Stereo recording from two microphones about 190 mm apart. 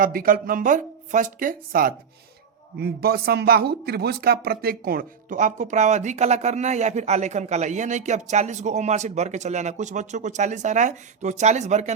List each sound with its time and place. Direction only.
0.0 s speech: 50° right (ahead or behind)